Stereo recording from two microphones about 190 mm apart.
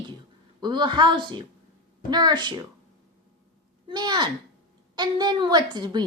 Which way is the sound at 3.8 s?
20° right (ahead or behind).